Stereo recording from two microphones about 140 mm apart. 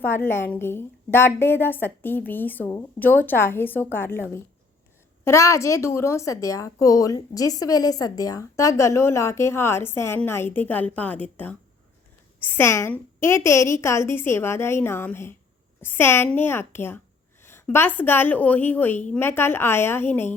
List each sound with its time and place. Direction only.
0.0 s a woman's voice: 15° left (ahead or behind)